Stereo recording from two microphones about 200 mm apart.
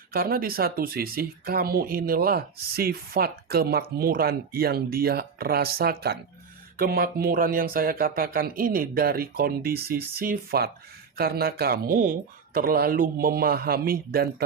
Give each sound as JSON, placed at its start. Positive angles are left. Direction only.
{"t": 0.1, "sound": "speech", "side_deg": -45}